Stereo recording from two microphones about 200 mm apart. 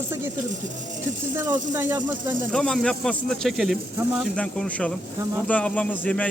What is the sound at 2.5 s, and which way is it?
Speech, 5° left (ahead or behind).